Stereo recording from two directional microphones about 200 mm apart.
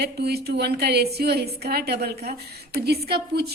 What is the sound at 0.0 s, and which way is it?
A woman's voice, 55° right (ahead or behind).